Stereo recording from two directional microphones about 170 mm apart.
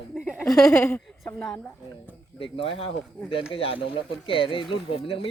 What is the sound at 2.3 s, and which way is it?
Speech, 30° left (ahead or behind).